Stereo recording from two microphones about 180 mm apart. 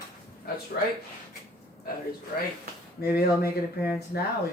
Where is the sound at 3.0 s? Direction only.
60° left (ahead or behind).